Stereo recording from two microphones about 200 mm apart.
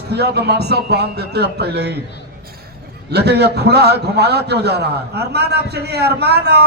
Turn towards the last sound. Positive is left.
turn(degrees=-55)  # may be behind; listen again after turning